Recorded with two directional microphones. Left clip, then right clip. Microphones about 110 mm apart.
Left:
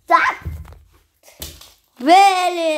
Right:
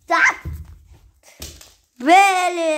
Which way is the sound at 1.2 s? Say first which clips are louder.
Left 1 dB; 15° right (ahead or behind).